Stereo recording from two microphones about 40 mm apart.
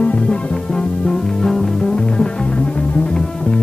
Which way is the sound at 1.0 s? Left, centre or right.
Centre.